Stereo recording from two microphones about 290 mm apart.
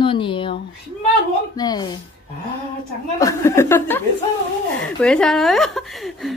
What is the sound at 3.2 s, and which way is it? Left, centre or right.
A woman's voice, centre.